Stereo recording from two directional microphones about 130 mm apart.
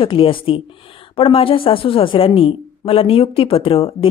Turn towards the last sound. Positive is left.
turn(degrees=45)  # may be behind; listen again after turning